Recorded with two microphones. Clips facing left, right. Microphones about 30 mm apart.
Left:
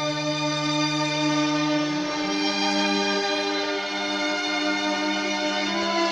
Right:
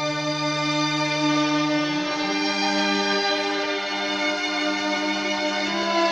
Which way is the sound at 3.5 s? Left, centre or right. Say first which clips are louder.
Right 1 dB; centre.